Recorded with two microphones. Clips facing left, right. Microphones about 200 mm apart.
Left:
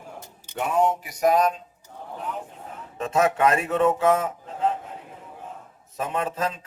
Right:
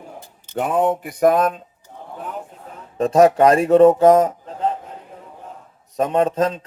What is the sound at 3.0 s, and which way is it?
A man's voice, 35° right (ahead or behind).